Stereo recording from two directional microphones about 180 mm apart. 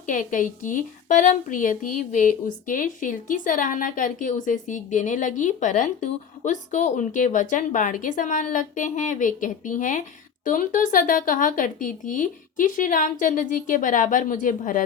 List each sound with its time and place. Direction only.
0.1 s a woman's voice: 45° left (ahead or behind)